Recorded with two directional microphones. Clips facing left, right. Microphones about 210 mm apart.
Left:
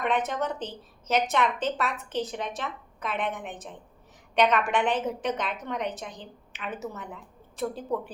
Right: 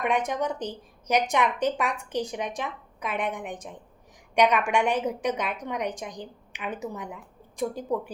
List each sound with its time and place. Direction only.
0.0 s a woman's voice: 10° right (ahead or behind)